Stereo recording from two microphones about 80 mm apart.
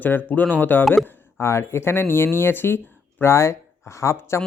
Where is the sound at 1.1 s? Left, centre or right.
Left.